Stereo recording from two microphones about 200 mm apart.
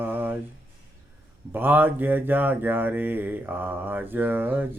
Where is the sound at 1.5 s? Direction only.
10° right (ahead or behind).